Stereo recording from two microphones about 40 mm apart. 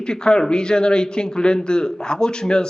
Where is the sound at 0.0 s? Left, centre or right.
Left.